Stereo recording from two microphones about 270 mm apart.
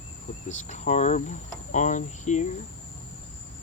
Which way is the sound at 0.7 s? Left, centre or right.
Left.